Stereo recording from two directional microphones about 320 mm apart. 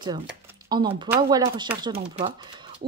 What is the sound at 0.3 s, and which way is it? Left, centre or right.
Speech, centre.